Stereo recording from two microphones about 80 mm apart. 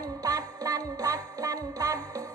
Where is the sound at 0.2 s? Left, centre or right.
Right.